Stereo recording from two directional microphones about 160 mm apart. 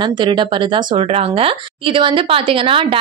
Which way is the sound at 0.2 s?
30° right (ahead or behind).